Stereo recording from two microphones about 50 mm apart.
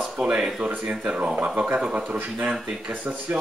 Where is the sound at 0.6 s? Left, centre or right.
Right.